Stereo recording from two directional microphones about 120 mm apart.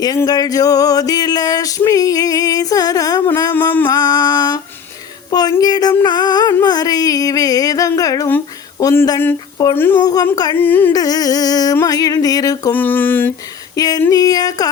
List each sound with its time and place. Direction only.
0.3 s male singing: 30° left (ahead or behind)
3.9 s music: 35° left (ahead or behind)
5.3 s speech: 35° left (ahead or behind)
6.0 s male singing: 35° left (ahead or behind)
8.8 s speech: 25° left (ahead or behind)
9.7 s a sound: 20° left (ahead or behind)
10.0 s male singing: 30° left (ahead or behind)
10.5 s a sound: 15° left (ahead or behind)
10.9 s male singing: 30° left (ahead or behind)
12.7 s a sound: 15° left (ahead or behind)
13.7 s male singing: 30° left (ahead or behind)